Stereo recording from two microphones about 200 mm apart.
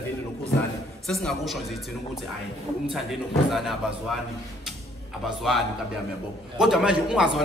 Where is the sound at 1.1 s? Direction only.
Centre (ahead or behind).